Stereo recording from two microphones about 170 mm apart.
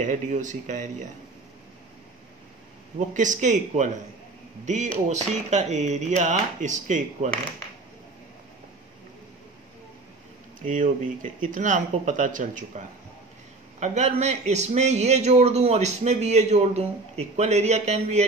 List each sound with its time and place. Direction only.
0.0 s speech: 45° right (ahead or behind)
3.1 s speech: 50° right (ahead or behind)
10.6 s speech: 50° right (ahead or behind)
13.7 s a man's voice: 45° right (ahead or behind)